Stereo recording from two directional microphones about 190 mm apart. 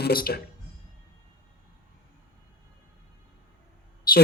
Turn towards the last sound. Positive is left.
turn(degrees=50)  # may be behind; listen again after turning